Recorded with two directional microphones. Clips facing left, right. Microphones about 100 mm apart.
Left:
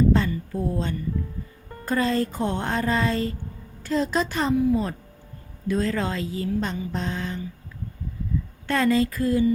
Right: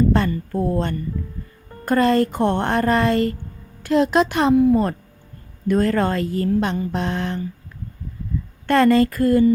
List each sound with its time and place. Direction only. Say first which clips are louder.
0.1 s a woman's voice: right 3 dB; 60° right (ahead or behind)
8.6 s a woman's voice: right 7 dB; 65° right (ahead or behind)